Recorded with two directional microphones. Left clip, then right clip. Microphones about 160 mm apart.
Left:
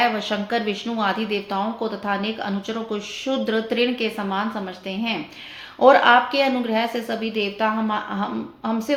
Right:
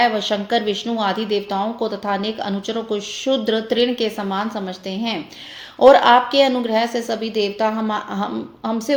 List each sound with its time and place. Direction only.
0.0 s speech: 40° right (ahead or behind)
5.8 s a woman's voice: 40° right (ahead or behind)